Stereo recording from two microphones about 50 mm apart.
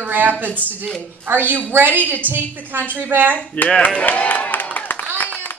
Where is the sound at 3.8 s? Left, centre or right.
Left.